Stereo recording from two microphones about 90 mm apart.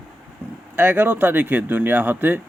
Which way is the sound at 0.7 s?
20° right (ahead or behind).